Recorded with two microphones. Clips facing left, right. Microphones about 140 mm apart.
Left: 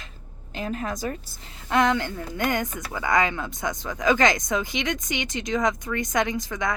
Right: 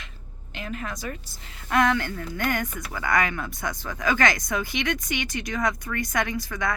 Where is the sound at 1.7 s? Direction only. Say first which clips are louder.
Left 1 dB; 20° left (ahead or behind).